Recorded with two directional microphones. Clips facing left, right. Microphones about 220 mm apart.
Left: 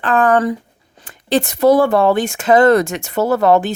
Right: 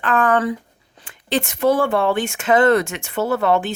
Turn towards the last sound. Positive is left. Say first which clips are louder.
# left 5 dB
turn(degrees=40)  # may be behind; listen again after turning